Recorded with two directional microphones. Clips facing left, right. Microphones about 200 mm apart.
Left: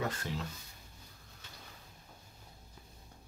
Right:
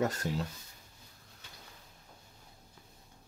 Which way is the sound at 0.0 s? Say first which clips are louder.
Right 5 dB; 45° right (ahead or behind).